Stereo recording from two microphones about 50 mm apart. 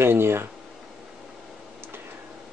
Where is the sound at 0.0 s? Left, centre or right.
Right.